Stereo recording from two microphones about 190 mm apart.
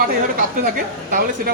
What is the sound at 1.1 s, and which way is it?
Speech, 50° right (ahead or behind).